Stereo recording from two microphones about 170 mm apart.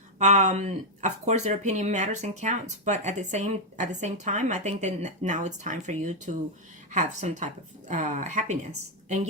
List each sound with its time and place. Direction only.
0.2 s speech: 45° right (ahead or behind)